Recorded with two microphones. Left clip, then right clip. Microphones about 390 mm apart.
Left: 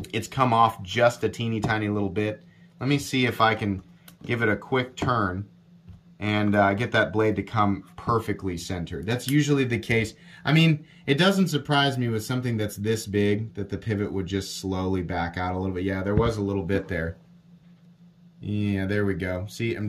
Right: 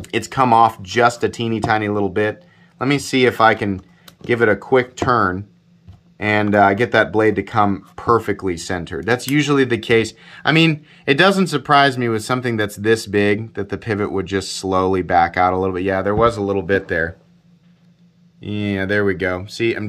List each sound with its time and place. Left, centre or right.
0.0 s speech: centre
2.8 s speech: centre
6.1 s speech: centre
18.4 s speech: centre